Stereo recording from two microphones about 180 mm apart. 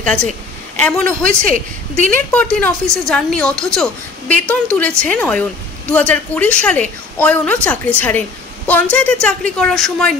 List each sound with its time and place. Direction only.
0.0 s a woman's voice: 5° left (ahead or behind)